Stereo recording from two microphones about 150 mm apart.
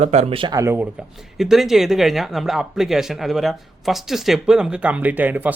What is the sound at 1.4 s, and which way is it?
Speech, centre (ahead or behind).